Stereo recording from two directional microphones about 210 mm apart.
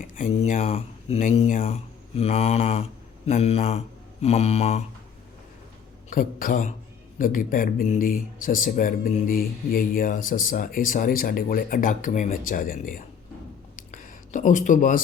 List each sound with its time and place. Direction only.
0.0 s speech: 40° left (ahead or behind)
2.1 s mantra: 30° left (ahead or behind)
3.2 s speech: 30° left (ahead or behind)
6.1 s speech: 40° left (ahead or behind)
13.7 s a sound: 40° left (ahead or behind)